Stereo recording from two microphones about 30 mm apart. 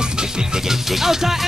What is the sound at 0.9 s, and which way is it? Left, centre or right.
Music, centre.